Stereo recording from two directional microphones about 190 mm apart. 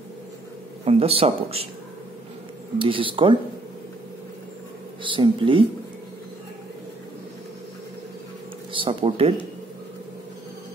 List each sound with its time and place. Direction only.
0.8 s speech: 30° right (ahead or behind)
2.8 s speech: 25° right (ahead or behind)
5.0 s speech: 25° right (ahead or behind)
8.7 s speech: 30° right (ahead or behind)